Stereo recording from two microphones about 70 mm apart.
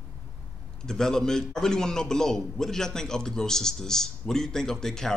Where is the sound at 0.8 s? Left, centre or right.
Centre.